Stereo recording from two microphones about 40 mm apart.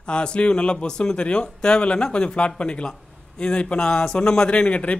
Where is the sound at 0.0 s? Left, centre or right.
Left.